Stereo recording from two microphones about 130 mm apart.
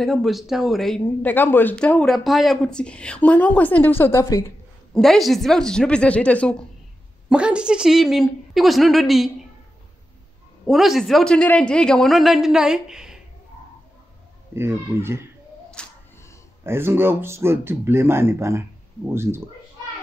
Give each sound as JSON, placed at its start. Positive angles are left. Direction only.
{"t": 0.0, "sound": "a man's voice", "side_deg": 0}
{"t": 1.2, "sound": "a woman's voice", "side_deg": 15}
{"t": 4.9, "sound": "a man's voice", "side_deg": 0}
{"t": 7.2, "sound": "a man's voice", "side_deg": -10}
{"t": 10.7, "sound": "a man's voice", "side_deg": 0}
{"t": 14.5, "sound": "speech", "side_deg": -20}
{"t": 15.8, "sound": "a sound", "side_deg": 5}
{"t": 16.6, "sound": "speech", "side_deg": -20}